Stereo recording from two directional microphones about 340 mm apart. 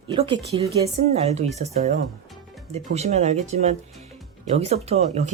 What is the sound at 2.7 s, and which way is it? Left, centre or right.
Speech, centre.